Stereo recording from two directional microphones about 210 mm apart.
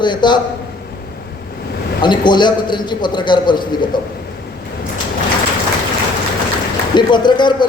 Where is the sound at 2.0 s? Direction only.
20° left (ahead or behind).